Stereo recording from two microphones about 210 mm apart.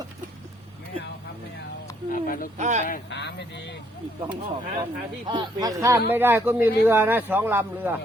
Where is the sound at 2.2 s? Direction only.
40° left (ahead or behind).